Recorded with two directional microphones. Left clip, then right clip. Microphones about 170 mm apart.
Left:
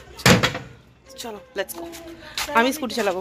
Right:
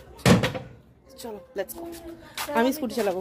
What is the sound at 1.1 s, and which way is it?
A woman's voice, 5° right (ahead or behind).